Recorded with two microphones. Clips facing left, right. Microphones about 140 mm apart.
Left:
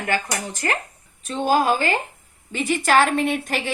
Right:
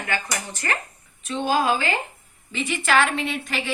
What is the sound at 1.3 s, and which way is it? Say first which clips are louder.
A woman's voice: left 2 dB; 45° left (ahead or behind).